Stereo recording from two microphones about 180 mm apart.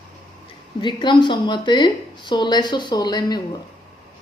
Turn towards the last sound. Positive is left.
turn(degrees=25)  # may be behind; listen again after turning